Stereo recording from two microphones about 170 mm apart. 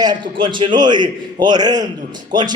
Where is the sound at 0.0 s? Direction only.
25° right (ahead or behind).